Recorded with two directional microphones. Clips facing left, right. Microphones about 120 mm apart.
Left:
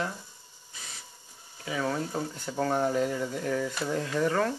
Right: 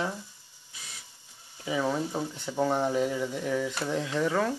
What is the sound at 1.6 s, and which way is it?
Speech, 15° right (ahead or behind).